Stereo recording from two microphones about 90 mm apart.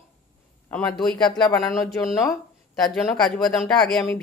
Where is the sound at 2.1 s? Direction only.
40° left (ahead or behind).